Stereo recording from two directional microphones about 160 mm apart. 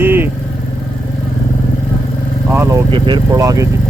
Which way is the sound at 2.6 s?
20° right (ahead or behind).